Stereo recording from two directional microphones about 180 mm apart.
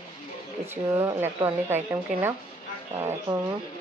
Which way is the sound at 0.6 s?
10° right (ahead or behind).